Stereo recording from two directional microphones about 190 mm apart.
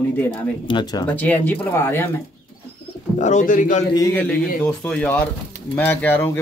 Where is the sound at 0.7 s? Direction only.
25° left (ahead or behind).